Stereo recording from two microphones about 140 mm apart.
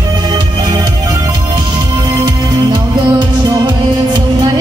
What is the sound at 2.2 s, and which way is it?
Music, 35° right (ahead or behind).